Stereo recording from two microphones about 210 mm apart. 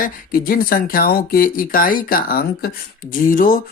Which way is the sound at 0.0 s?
45° left (ahead or behind).